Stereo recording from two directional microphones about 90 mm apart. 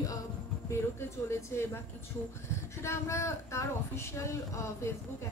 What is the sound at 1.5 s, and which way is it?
Speech, 30° left (ahead or behind).